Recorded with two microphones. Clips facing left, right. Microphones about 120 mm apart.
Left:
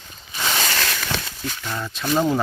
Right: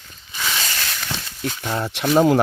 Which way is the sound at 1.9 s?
75° right (ahead or behind).